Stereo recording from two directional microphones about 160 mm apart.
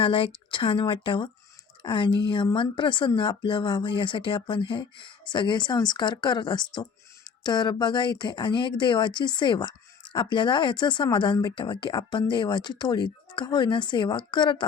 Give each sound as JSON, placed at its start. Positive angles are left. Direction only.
{"t": 0.0, "sound": "speech", "side_deg": 35}